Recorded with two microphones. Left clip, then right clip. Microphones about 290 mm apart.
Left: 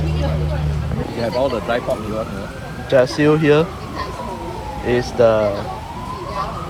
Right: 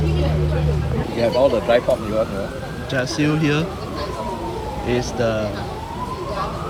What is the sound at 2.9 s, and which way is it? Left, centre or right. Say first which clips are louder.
Speech: left 8 dB; centre.